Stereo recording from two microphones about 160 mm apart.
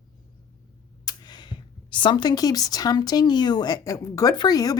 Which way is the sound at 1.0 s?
25° left (ahead or behind).